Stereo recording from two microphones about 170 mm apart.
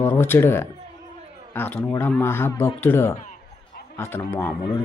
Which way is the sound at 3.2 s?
50° left (ahead or behind).